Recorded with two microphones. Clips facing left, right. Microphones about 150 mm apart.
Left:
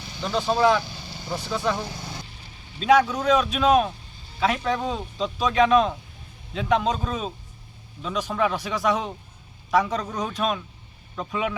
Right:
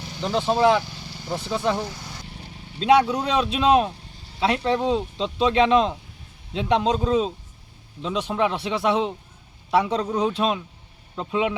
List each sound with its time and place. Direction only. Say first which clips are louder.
0.2 s speech: right 1 dB; 25° right (ahead or behind)
2.2 s vehicle: right 6 dB; 65° right (ahead or behind)
2.7 s speech: right 1 dB; 30° right (ahead or behind)